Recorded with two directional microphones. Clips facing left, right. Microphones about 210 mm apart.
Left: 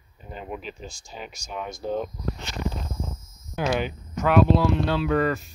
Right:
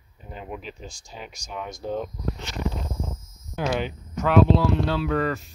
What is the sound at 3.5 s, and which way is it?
Speech, 10° left (ahead or behind).